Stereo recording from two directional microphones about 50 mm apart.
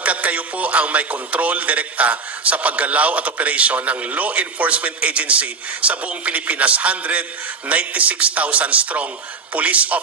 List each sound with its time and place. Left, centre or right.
0.0 s a man's voice: right